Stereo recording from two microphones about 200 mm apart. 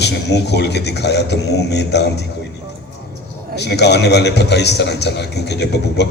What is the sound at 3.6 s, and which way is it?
A man's voice, 55° left (ahead or behind).